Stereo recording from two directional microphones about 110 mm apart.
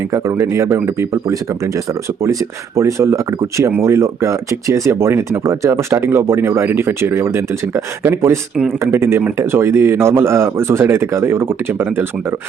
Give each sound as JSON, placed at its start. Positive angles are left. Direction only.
{"t": 0.1, "sound": "speech", "side_deg": -25}